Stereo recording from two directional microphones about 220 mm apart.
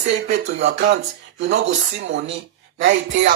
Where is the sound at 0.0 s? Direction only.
50° right (ahead or behind).